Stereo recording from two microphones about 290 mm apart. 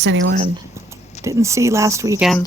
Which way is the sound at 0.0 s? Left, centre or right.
Right.